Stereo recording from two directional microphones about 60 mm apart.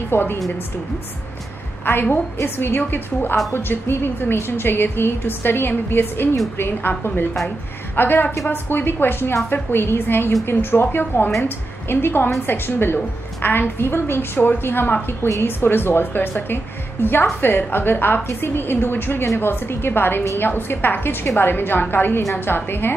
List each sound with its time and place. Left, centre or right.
0.1 s a woman's voice: left
1.9 s a woman's voice: left